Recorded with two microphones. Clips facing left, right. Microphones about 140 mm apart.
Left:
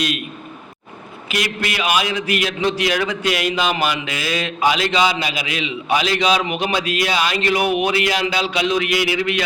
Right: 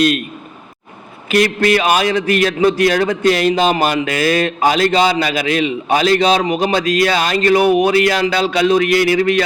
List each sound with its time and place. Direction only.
1.3 s a man's voice: 45° right (ahead or behind)